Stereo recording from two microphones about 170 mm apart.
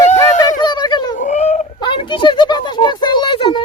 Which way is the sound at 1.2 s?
45° left (ahead or behind).